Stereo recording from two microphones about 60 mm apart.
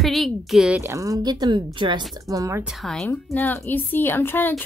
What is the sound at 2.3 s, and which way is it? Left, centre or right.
Speech, right.